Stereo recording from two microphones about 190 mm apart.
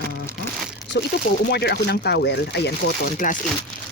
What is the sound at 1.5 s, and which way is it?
Speech, 60° left (ahead or behind).